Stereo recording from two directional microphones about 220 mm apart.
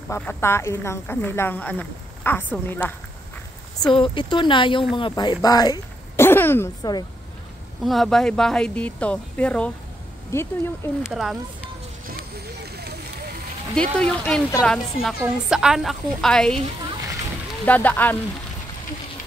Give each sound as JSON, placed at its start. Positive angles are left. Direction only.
{"t": 0.1, "sound": "speech", "side_deg": 10}
{"t": 3.8, "sound": "speech", "side_deg": 20}
{"t": 7.8, "sound": "a woman's voice", "side_deg": 0}
{"t": 11.0, "sound": "a woman's voice", "side_deg": 0}
{"t": 12.1, "sound": "vehicle", "side_deg": -45}
{"t": 13.7, "sound": "a woman's voice", "side_deg": 5}
{"t": 17.6, "sound": "speech", "side_deg": 10}